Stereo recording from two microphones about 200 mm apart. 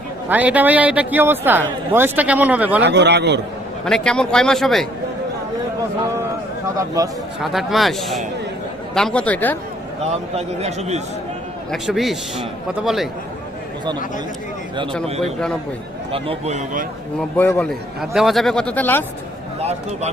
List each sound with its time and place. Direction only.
0.3 s a man's voice: 5° right (ahead or behind)
2.8 s a man's voice: 60° right (ahead or behind)
3.8 s a man's voice: 5° left (ahead or behind)
6.7 s a man's voice: 15° right (ahead or behind)
7.4 s a man's voice: centre (ahead or behind)
10.0 s a man's voice: 30° right (ahead or behind)
11.7 s a man's voice: centre (ahead or behind)
15.0 s a man's voice: 30° right (ahead or behind)
17.2 s a man's voice: 10° left (ahead or behind)